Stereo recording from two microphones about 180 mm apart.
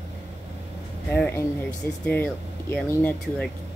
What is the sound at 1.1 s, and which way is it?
A woman's voice, 10° left (ahead or behind).